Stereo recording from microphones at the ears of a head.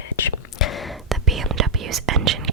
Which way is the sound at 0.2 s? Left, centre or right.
Left.